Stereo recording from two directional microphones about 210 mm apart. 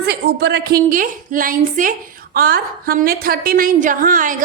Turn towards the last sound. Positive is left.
turn(degrees=-40)  # may be behind; listen again after turning